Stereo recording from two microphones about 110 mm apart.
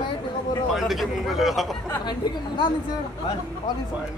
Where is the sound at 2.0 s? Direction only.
45° left (ahead or behind).